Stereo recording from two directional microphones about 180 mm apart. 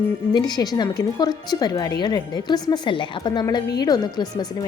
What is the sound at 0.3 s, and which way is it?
A woman's voice, 25° left (ahead or behind).